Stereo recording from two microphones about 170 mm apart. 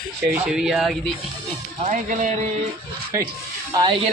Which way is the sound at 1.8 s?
50° right (ahead or behind).